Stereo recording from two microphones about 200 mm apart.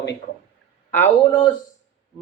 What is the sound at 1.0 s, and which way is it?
Speech, 25° left (ahead or behind).